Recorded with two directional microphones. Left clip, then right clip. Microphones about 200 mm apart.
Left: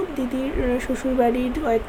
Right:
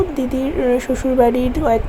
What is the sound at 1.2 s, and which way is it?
Speech, 20° right (ahead or behind).